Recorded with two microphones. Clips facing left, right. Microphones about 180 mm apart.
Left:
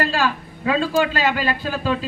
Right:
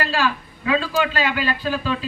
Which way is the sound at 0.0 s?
45° left (ahead or behind).